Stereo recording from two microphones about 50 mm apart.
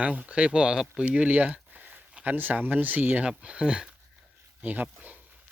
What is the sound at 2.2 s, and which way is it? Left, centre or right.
Speech, right.